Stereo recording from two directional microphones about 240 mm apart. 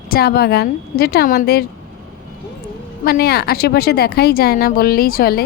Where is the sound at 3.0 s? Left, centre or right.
Left.